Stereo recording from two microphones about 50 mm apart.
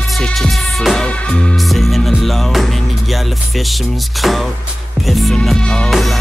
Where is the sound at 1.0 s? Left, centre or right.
Left.